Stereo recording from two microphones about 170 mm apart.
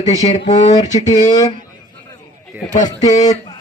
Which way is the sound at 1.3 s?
25° left (ahead or behind).